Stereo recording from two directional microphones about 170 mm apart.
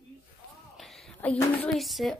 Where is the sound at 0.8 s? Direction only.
5° left (ahead or behind).